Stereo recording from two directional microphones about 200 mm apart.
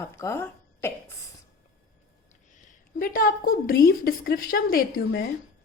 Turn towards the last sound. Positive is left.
turn(degrees=45)  # may be behind; listen again after turning